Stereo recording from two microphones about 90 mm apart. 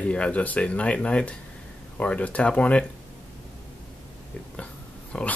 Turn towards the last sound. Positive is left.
turn(degrees=10)  # may be behind; listen again after turning